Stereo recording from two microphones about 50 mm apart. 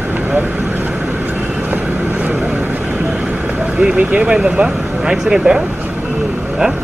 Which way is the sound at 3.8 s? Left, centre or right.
Centre.